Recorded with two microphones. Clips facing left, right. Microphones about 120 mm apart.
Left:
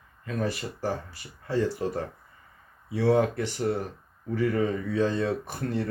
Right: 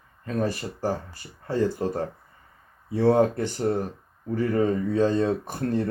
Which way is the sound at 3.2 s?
35° right (ahead or behind).